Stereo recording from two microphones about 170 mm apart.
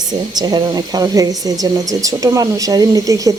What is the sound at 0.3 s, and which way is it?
Speech, 25° right (ahead or behind).